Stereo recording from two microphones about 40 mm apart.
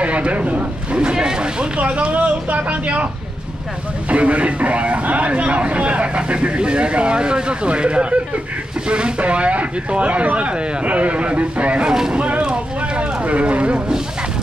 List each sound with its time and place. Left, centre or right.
0.0 s a man's voice: right
0.9 s speech: right
1.8 s a man's voice: right
4.1 s a man's voice: right
12.1 s a sound: right
13.2 s a man's voice: right